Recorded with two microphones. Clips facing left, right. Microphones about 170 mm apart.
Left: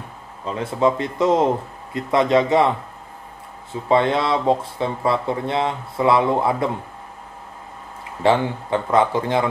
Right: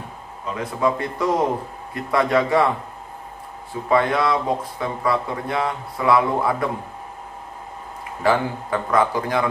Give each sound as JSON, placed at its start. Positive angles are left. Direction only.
{"t": 0.6, "sound": "speech", "side_deg": 25}
{"t": 3.9, "sound": "speech", "side_deg": 25}
{"t": 8.2, "sound": "speech", "side_deg": 25}